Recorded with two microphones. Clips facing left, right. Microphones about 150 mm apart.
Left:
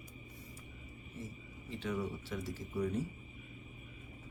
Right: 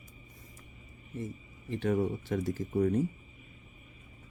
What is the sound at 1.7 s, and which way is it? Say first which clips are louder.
Speech: right 9 dB; 55° right (ahead or behind).